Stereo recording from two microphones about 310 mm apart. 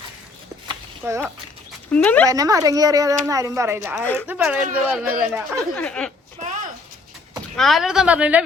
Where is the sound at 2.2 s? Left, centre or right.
Centre.